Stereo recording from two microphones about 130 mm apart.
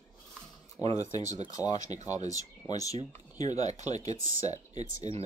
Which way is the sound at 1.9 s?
65° right (ahead or behind).